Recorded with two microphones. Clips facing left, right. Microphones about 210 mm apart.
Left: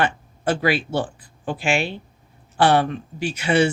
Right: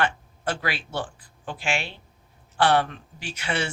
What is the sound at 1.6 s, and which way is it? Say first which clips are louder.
Speech: left 6 dB; 10° left (ahead or behind).